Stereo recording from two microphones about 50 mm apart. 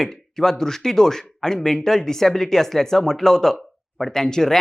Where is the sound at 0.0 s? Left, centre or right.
Centre.